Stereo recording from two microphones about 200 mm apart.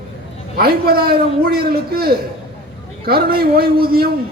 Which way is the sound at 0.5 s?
50° right (ahead or behind).